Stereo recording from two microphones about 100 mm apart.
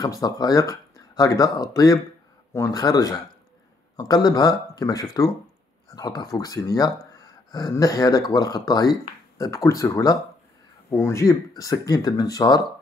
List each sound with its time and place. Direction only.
0.0 s speech: 40° left (ahead or behind)
2.8 s speech: 40° left (ahead or behind)
7.2 s a sound: 40° left (ahead or behind)
7.7 s speech: 35° left (ahead or behind)